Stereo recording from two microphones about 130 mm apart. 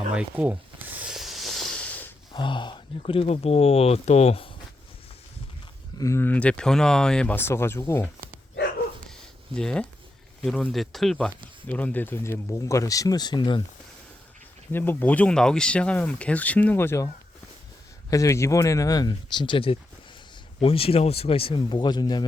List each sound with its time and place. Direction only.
0.1 s a sound: 10° right (ahead or behind); by 2.0 s 10° left (ahead or behind)
2.3 s speech: 40° left (ahead or behind)
6.0 s speech: 20° left (ahead or behind)
7.3 s speech: 20° left (ahead or behind)
9.6 s speech: 5° left (ahead or behind); by 13.6 s 35° left (ahead or behind)
14.7 s speech: 15° left (ahead or behind)
18.1 s speech: 25° left (ahead or behind)